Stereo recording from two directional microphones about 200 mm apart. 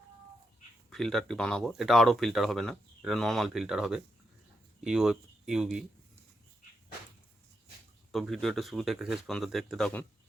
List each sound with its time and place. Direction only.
0.9 s speech: centre (ahead or behind)
8.1 s speech: centre (ahead or behind)